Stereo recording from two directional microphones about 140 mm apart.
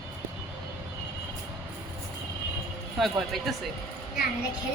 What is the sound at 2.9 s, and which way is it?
Speech, centre (ahead or behind).